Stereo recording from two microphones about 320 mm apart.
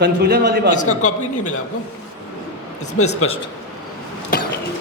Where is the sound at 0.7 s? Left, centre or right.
Left.